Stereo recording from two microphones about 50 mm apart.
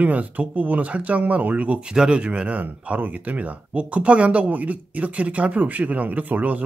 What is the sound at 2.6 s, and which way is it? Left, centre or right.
Speech, right.